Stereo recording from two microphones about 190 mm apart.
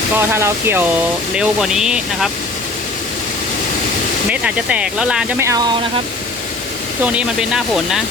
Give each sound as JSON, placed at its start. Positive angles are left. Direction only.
{"t": 0.2, "sound": "speech", "side_deg": -15}
{"t": 4.3, "sound": "speech", "side_deg": -5}
{"t": 5.4, "sound": "speech", "side_deg": -20}
{"t": 7.0, "sound": "speech", "side_deg": -5}